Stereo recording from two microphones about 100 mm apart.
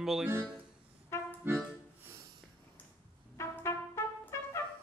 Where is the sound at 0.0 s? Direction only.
5° right (ahead or behind).